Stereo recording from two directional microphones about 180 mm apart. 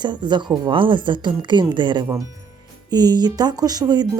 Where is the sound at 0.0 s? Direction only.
25° right (ahead or behind).